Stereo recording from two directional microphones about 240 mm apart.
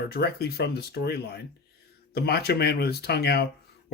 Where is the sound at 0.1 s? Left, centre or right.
Left.